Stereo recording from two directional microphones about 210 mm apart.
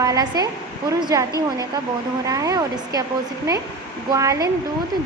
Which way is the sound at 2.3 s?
15° right (ahead or behind).